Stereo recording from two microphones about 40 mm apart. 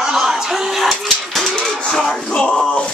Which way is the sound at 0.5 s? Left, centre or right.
Centre.